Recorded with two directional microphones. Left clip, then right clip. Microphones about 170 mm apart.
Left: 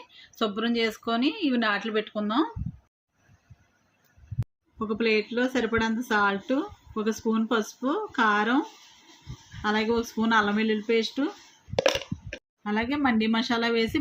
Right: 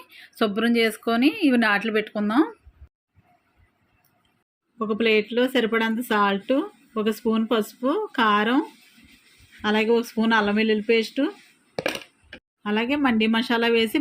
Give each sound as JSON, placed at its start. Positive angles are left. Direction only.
{"t": 0.1, "sound": "speech", "side_deg": -25}
{"t": 4.8, "sound": "speech", "side_deg": -25}
{"t": 11.8, "sound": "a sound", "side_deg": 0}
{"t": 12.6, "sound": "speech", "side_deg": -20}